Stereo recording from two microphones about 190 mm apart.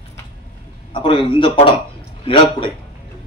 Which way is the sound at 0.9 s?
25° left (ahead or behind).